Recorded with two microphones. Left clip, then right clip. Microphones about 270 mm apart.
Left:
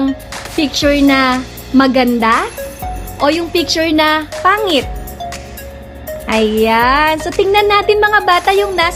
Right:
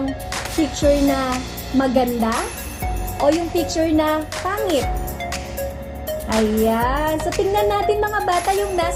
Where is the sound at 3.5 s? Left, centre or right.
Left.